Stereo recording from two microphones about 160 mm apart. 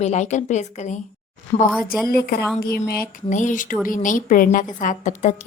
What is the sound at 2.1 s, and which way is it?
Speech, 75° left (ahead or behind).